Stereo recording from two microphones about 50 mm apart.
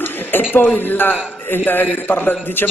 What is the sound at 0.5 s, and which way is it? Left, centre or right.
A man's voice, left.